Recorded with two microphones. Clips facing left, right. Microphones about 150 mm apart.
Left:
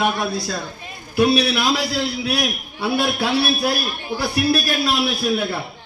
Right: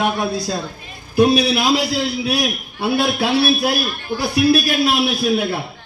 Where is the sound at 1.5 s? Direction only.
15° right (ahead or behind).